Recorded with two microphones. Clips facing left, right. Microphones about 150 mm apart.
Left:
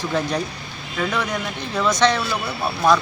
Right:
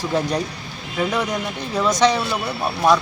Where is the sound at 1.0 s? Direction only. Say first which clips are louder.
Right 2 dB; 15° right (ahead or behind).